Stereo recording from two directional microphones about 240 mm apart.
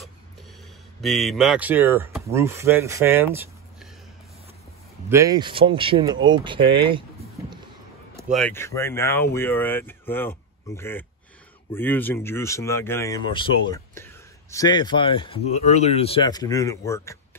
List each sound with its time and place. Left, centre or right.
1.0 s speech: centre
5.1 s speech: centre
8.2 s speech: centre